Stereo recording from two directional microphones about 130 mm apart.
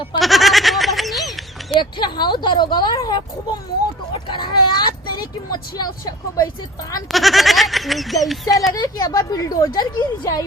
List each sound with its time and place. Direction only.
0.2 s goat: centre (ahead or behind)
1.7 s speech: 35° left (ahead or behind)
7.1 s speech: centre (ahead or behind)
8.7 s speech: 25° left (ahead or behind)